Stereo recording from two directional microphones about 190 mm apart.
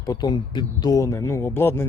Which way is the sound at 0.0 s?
20° left (ahead or behind).